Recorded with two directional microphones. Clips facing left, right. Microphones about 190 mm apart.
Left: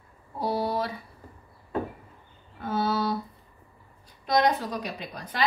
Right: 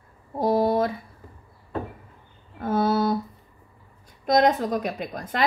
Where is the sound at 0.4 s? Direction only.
50° right (ahead or behind).